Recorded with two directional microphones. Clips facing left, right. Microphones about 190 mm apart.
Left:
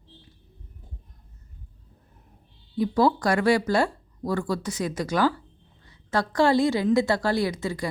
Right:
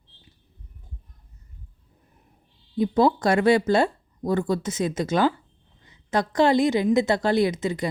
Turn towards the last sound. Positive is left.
turn(degrees=-20)  # may be behind; listen again after turning